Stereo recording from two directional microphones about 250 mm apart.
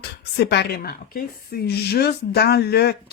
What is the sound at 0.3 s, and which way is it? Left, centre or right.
A woman's voice, left.